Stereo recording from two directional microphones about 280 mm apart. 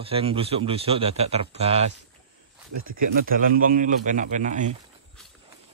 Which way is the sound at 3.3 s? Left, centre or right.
Right.